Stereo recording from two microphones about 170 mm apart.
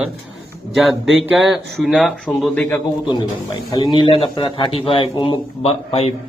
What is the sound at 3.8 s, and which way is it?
Speech, 30° left (ahead or behind).